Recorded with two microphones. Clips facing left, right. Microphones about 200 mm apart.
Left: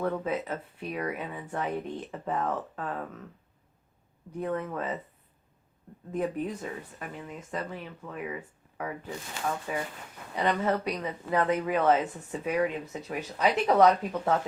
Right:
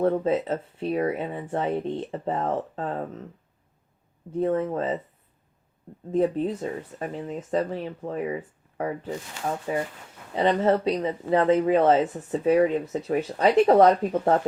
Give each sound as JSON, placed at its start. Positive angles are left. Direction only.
{"t": 0.0, "sound": "speech", "side_deg": -30}
{"t": 4.3, "sound": "speech", "side_deg": -30}
{"t": 6.1, "sound": "speech", "side_deg": -30}
{"t": 13.8, "sound": "speech", "side_deg": -40}